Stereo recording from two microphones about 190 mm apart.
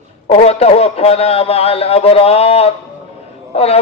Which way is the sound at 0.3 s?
35° left (ahead or behind).